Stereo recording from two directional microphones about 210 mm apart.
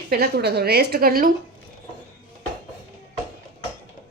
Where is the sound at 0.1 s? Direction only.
50° right (ahead or behind).